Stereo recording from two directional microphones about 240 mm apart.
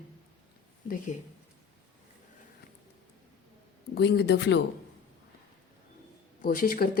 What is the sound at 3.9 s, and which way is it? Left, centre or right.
Speech, left.